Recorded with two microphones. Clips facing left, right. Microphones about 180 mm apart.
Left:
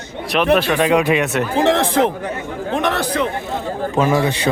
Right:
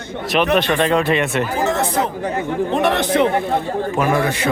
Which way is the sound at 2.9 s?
25° right (ahead or behind).